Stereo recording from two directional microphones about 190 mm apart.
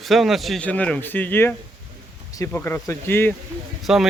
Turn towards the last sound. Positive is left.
turn(degrees=-5)  # may be behind; listen again after turning